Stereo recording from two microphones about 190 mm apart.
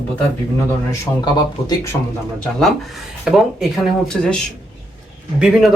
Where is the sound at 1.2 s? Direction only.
20° left (ahead or behind).